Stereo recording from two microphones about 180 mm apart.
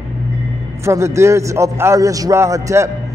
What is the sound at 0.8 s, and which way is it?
A man's voice, 15° right (ahead or behind).